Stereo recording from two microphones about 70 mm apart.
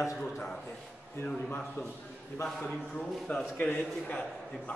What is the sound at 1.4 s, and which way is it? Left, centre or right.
Speech, left.